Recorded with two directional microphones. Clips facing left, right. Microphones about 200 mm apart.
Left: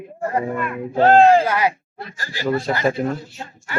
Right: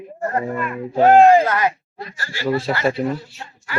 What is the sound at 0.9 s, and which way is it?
Speech, 15° right (ahead or behind).